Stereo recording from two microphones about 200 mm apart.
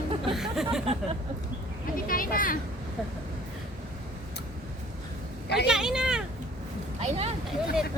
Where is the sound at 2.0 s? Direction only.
45° left (ahead or behind).